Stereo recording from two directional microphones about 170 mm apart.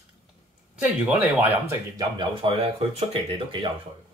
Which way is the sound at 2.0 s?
30° right (ahead or behind).